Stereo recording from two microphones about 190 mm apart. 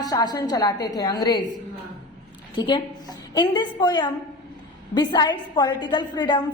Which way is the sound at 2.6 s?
20° left (ahead or behind).